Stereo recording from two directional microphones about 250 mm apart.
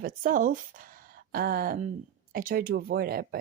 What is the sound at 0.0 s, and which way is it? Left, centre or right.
Speech, right.